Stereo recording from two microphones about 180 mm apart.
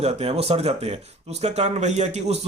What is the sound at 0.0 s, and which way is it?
A man's voice, 35° right (ahead or behind).